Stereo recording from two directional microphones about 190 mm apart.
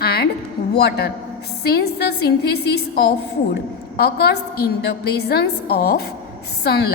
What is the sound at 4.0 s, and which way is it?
A woman's voice, 55° left (ahead or behind).